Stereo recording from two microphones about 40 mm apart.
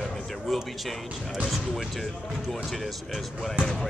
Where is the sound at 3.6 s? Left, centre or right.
Centre.